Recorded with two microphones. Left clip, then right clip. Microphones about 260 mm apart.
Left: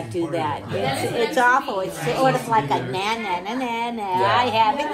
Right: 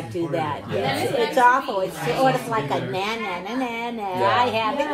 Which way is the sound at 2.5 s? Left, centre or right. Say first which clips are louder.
Left 4 dB; left.